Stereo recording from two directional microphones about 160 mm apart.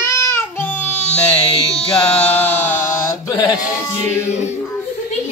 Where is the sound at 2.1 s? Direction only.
10° left (ahead or behind); by 4.0 s 25° left (ahead or behind).